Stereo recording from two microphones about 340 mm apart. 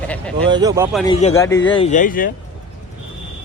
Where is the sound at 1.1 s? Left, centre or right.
Centre.